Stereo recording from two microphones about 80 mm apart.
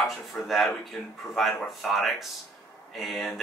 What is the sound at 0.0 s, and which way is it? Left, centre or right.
Speech, centre.